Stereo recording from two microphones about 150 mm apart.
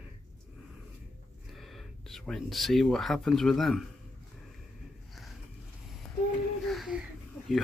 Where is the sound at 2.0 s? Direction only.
Centre (ahead or behind).